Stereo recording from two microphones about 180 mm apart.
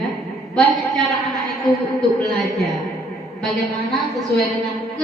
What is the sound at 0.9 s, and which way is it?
A woman's voice, centre (ahead or behind).